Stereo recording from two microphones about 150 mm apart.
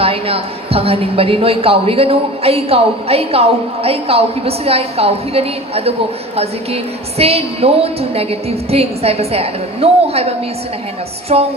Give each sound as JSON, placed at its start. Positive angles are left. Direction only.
{"t": 0.0, "sound": "a woman's voice", "side_deg": -40}